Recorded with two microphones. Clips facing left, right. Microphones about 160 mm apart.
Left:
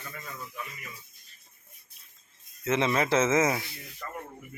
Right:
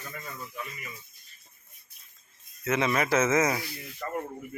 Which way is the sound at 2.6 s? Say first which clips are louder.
Even; 25° left (ahead or behind).